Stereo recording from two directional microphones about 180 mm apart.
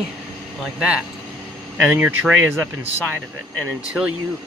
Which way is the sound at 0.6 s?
5° right (ahead or behind).